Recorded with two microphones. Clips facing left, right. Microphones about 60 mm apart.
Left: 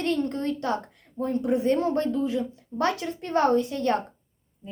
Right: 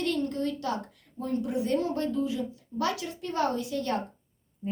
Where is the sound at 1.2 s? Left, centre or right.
Left.